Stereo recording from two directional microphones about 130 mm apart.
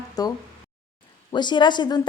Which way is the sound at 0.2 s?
30° left (ahead or behind).